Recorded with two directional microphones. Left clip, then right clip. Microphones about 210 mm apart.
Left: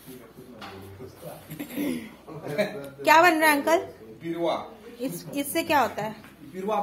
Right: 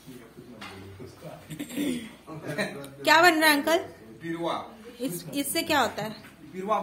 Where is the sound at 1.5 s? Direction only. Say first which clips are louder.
Even; 10° right (ahead or behind).